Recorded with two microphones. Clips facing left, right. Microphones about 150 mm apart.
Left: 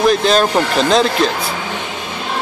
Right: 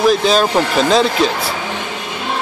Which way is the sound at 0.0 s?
Centre (ahead or behind).